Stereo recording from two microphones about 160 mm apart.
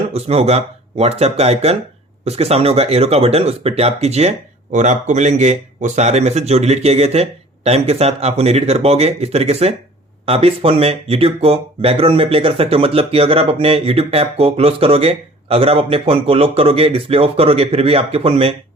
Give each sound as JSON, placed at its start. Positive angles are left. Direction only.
{"t": 0.1, "sound": "speech", "side_deg": -40}